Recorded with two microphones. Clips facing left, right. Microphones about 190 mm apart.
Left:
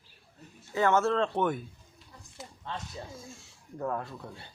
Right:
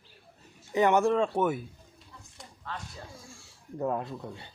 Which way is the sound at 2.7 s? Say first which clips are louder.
Left 1 dB; 25° left (ahead or behind).